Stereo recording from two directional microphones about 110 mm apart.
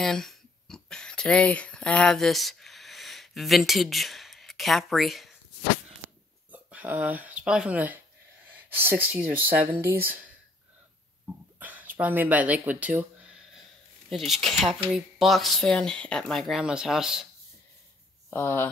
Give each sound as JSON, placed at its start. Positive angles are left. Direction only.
{"t": 0.0, "sound": "a sound", "side_deg": 5}
{"t": 6.5, "sound": "speech", "side_deg": -15}
{"t": 11.6, "sound": "speech", "side_deg": -15}
{"t": 14.0, "sound": "speech", "side_deg": 0}
{"t": 18.3, "sound": "speech", "side_deg": 20}